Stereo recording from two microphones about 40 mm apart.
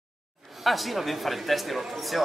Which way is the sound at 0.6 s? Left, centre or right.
Centre.